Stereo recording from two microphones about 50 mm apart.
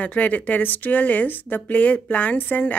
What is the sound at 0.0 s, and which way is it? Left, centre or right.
Speech, left.